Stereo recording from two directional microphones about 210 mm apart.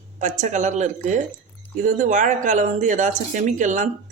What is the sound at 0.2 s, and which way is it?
Speech, 35° right (ahead or behind).